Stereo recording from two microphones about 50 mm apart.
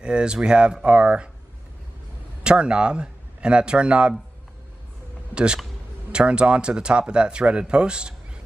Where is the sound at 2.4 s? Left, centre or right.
Centre.